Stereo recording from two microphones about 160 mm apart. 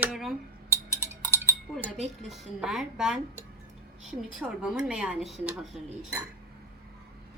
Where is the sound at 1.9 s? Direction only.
45° right (ahead or behind).